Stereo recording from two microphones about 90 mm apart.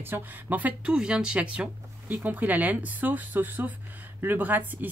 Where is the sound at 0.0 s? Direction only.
20° right (ahead or behind).